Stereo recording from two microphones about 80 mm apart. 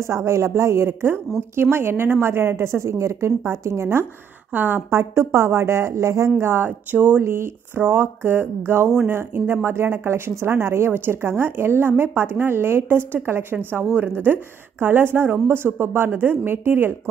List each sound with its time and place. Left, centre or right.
0.1 s a woman's voice: right
6.4 s speech: right